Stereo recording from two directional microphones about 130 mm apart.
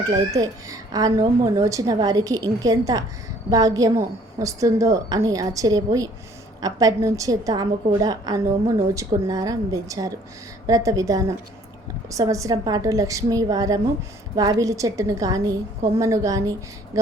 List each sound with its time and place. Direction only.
0.0 s a woman's voice: 30° right (ahead or behind)